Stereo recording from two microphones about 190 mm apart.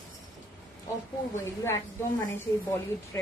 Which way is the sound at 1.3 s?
15° left (ahead or behind).